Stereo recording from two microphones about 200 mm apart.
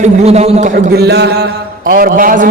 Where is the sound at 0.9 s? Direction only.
55° right (ahead or behind).